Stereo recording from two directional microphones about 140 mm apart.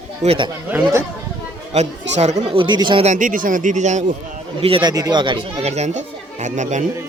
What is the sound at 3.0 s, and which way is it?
Speech, 65° right (ahead or behind).